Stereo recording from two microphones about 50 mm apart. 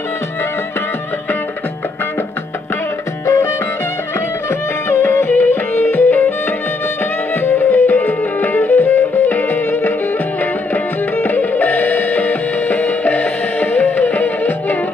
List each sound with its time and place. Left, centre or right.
4.8 s music: left
7.4 s music: left